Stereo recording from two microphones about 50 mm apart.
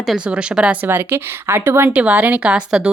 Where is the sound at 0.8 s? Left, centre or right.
Right.